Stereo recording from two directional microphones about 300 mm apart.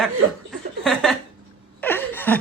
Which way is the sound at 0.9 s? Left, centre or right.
Centre.